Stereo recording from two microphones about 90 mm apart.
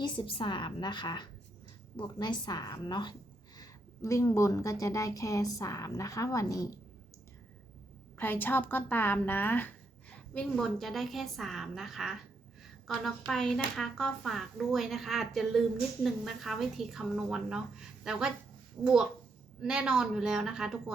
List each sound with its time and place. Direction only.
0.0 s a woman's voice: 75° left (ahead or behind); by 3.2 s 55° left (ahead or behind)
4.0 s a woman's voice: 35° left (ahead or behind)
8.2 s a woman's voice: 20° left (ahead or behind)
10.3 s a woman's voice: 5° left (ahead or behind)